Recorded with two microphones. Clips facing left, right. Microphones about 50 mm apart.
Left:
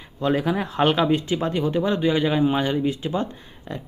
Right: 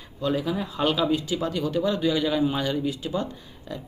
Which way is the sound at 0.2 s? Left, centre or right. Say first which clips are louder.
Left 4 dB; left.